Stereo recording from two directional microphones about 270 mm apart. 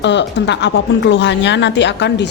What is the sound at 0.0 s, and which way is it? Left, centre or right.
Speech, left.